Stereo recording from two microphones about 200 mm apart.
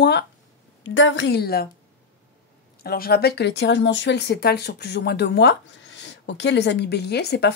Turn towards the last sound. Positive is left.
turn(degrees=55)  # may be behind; listen again after turning